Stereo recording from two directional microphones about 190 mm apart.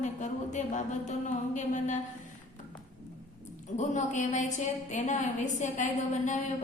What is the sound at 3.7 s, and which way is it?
A woman's voice, 40° left (ahead or behind).